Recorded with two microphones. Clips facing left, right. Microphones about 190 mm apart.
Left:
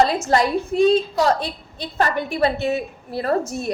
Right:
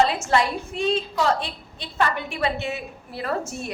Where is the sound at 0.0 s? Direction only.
40° left (ahead or behind).